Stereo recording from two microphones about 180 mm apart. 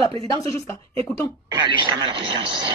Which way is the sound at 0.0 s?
30° right (ahead or behind).